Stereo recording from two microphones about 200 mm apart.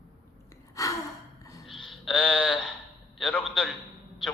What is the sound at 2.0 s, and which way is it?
A man's voice, 5° left (ahead or behind).